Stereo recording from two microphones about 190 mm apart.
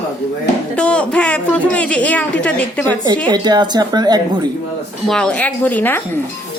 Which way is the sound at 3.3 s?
20° right (ahead or behind).